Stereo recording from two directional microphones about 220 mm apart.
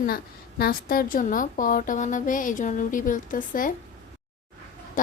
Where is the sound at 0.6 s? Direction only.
40° left (ahead or behind).